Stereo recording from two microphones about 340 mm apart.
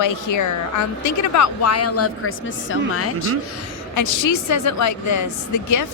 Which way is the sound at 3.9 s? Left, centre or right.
Left.